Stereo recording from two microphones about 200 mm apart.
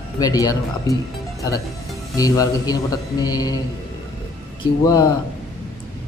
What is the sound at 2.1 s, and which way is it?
A man's voice, 15° left (ahead or behind).